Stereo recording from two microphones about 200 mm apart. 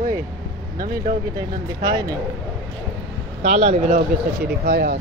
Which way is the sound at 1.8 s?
20° right (ahead or behind).